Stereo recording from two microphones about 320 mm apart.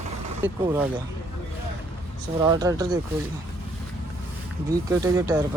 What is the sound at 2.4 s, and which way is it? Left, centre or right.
Speech, centre.